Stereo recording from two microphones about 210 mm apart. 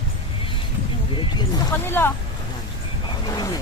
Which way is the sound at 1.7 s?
10° left (ahead or behind).